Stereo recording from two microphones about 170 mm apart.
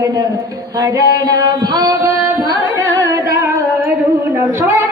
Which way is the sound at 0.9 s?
20° right (ahead or behind).